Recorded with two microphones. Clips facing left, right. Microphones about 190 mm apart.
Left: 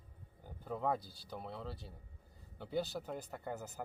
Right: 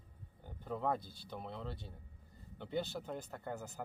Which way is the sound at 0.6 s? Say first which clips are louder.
Even; 5° left (ahead or behind).